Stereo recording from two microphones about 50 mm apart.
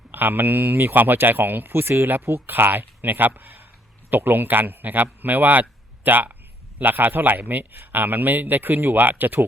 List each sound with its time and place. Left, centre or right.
0.1 s speech: right